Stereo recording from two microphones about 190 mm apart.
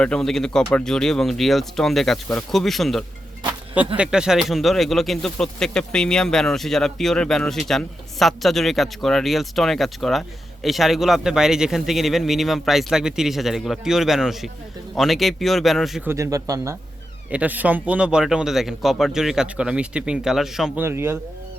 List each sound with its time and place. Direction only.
0.0 s speech: 5° left (ahead or behind)
16.0 s speech: 15° right (ahead or behind)